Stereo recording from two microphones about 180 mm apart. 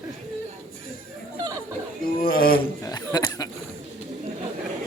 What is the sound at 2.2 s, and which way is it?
Speech, 55° left (ahead or behind).